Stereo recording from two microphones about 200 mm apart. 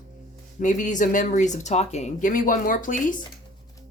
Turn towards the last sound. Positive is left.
turn(degrees=40)  # may be behind; listen again after turning